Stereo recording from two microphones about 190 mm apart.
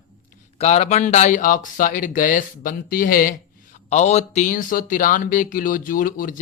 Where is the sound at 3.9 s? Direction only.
35° left (ahead or behind).